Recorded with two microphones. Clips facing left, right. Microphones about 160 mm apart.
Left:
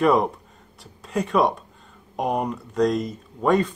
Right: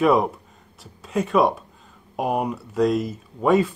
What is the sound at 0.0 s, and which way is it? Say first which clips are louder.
Speech: right 1 dB; centre (ahead or behind).